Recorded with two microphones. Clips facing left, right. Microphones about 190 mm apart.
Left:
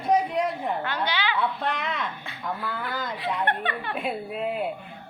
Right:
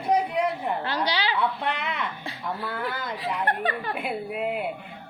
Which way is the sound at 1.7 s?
65° right (ahead or behind).